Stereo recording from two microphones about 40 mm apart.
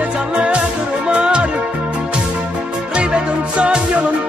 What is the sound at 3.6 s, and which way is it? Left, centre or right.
Music, right.